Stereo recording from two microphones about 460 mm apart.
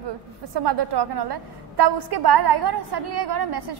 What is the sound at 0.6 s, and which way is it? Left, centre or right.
A woman's voice, right.